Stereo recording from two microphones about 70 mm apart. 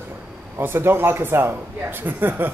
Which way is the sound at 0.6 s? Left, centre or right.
Right.